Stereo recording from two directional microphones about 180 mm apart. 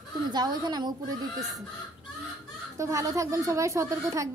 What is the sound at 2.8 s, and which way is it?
A woman's voice, 20° right (ahead or behind).